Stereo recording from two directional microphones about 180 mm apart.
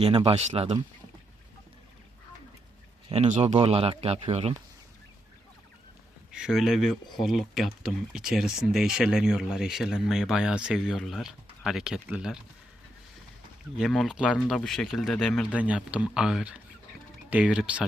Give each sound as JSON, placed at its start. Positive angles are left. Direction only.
{"t": 0.0, "sound": "speech", "side_deg": -30}
{"t": 3.1, "sound": "speech", "side_deg": -40}
{"t": 6.3, "sound": "speech", "side_deg": -5}
{"t": 13.7, "sound": "speech", "side_deg": 0}